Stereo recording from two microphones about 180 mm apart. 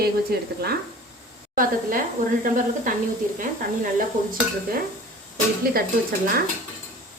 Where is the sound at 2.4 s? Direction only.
45° right (ahead or behind).